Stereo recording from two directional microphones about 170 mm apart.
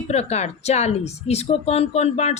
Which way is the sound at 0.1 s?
40° left (ahead or behind).